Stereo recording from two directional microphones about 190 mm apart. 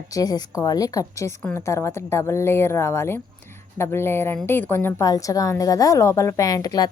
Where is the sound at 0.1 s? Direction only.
20° left (ahead or behind).